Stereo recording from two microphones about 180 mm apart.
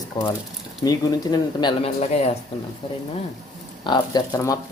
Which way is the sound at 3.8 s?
25° left (ahead or behind).